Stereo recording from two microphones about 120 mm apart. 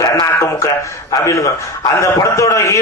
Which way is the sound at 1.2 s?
25° left (ahead or behind).